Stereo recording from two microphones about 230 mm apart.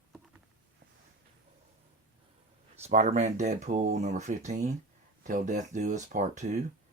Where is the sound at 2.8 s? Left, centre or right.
Right.